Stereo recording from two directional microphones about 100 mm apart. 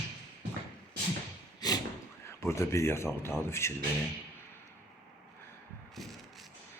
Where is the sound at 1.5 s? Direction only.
40° left (ahead or behind).